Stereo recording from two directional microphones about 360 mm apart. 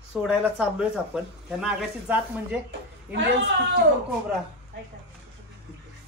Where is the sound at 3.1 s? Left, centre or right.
Right.